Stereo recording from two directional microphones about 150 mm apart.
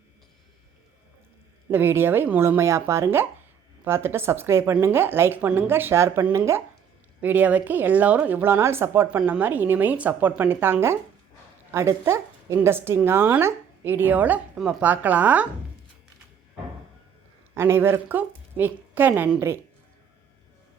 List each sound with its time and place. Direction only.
1.7 s a woman's voice: 15° right (ahead or behind)
17.5 s a woman's voice: 15° right (ahead or behind)